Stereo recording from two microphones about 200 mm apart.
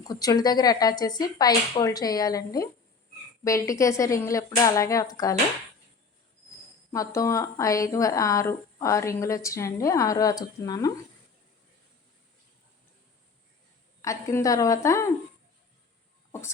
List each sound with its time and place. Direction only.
0.0 s a woman's voice: 20° left (ahead or behind)
6.9 s a woman's voice: 15° left (ahead or behind)
14.0 s a woman's voice: 15° left (ahead or behind)